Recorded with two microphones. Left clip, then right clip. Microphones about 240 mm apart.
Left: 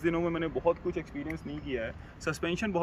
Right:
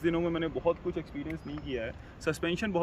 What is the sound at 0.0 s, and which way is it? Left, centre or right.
Speech, centre.